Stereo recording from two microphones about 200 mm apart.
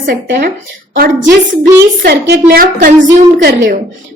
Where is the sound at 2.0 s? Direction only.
55° right (ahead or behind).